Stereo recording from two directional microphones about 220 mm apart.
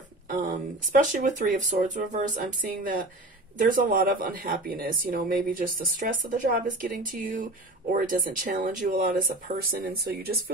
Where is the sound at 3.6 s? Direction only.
40° right (ahead or behind).